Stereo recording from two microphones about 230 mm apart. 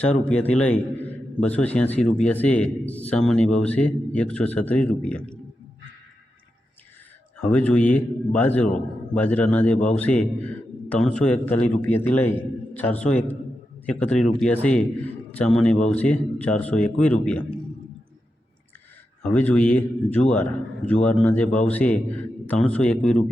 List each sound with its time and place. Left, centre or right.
0.3 s a man's voice: centre
7.4 s a man's voice: centre
9.7 s speech: left
10.0 s a man's voice: centre
19.2 s a man's voice: centre